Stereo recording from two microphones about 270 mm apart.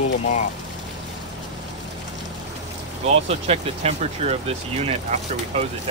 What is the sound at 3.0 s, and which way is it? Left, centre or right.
Speech, right.